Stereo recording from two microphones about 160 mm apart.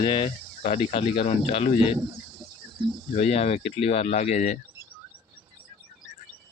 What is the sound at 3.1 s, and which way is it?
Speech, 40° left (ahead or behind).